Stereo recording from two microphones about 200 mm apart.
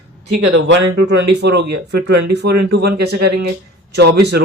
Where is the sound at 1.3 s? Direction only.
55° right (ahead or behind).